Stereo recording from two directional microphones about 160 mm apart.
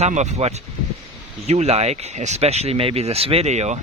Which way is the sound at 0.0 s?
45° right (ahead or behind).